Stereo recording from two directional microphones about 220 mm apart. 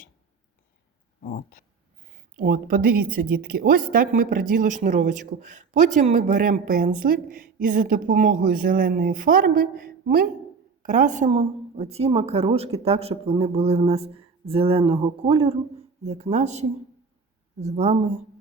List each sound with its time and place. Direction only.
1.2 s speech: 40° left (ahead or behind)
2.0 s a woman's voice: 35° right (ahead or behind)